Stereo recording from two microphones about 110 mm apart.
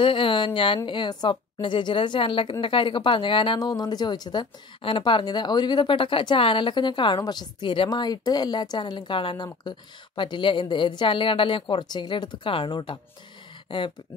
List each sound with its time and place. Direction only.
0.0 s a woman's voice: 50° left (ahead or behind)
3.5 s a woman's voice: 40° left (ahead or behind)